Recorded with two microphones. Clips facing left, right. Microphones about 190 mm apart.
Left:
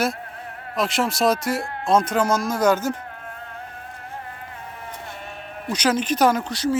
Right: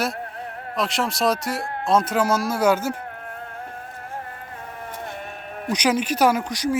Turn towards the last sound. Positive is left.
turn(degrees=-15)  # may be behind; listen again after turning